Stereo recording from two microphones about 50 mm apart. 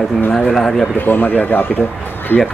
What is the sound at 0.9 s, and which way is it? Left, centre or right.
Speech, left.